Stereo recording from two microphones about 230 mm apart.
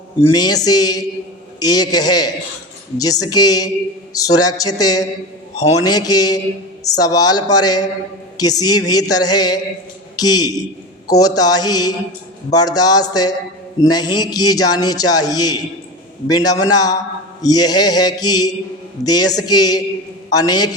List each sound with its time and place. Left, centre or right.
0.2 s a man's voice: centre